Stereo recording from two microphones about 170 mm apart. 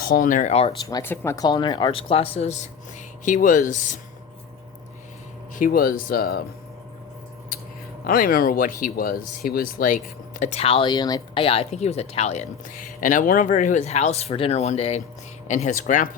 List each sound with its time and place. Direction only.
0.0 s speech: 55° left (ahead or behind); by 0.7 s 40° left (ahead or behind)
0.8 s speech: 20° left (ahead or behind); by 3.9 s 45° left (ahead or behind)
5.5 s speech: 55° left (ahead or behind)
8.0 s speech: 60° left (ahead or behind)
10.4 s speech: 40° left (ahead or behind)